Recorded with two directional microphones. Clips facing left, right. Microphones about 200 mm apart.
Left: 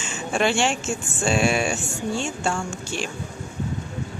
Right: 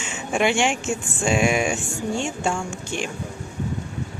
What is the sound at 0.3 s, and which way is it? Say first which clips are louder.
Speech: right 1 dB; 15° right (ahead or behind).